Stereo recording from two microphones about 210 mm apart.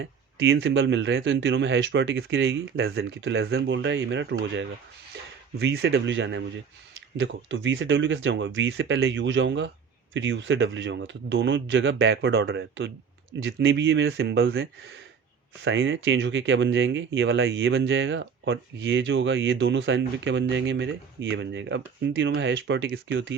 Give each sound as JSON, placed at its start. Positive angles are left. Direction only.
{"t": 0.0, "sound": "speech", "side_deg": -60}